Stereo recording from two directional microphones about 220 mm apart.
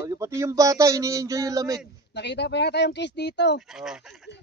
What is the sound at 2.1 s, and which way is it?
Speech, 50° left (ahead or behind).